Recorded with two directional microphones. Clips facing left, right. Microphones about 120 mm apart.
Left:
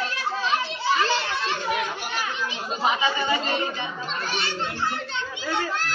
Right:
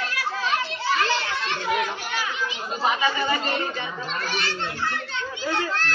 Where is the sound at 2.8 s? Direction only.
20° left (ahead or behind).